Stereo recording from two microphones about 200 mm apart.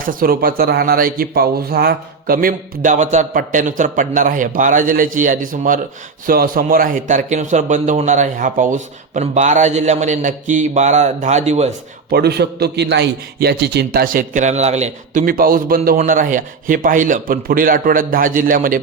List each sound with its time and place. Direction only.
0.0 s a man's voice: 45° right (ahead or behind)
12.1 s a man's voice: 55° right (ahead or behind)